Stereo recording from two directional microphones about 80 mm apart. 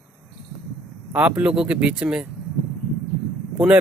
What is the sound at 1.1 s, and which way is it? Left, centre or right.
Speech, right.